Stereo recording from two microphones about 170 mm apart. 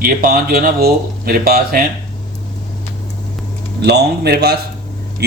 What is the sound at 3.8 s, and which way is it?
Speech, 75° right (ahead or behind).